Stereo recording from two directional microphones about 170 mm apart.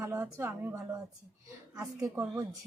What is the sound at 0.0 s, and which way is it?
Speech, 15° right (ahead or behind).